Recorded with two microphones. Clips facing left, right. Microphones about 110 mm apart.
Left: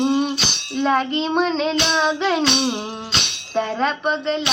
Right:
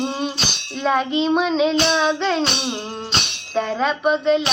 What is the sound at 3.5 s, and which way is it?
Child singing, centre (ahead or behind).